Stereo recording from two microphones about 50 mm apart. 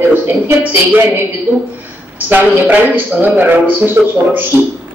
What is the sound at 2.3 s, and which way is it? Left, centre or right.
A man's voice, right.